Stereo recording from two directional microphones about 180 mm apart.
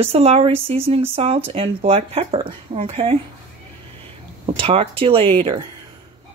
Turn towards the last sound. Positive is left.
turn(degrees=-25)  # may be behind; listen again after turning